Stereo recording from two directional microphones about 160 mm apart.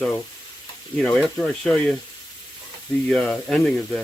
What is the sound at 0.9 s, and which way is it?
Speech, centre (ahead or behind).